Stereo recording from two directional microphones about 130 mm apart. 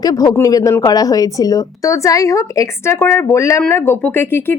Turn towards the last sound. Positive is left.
turn(degrees=15)  # may be behind; listen again after turning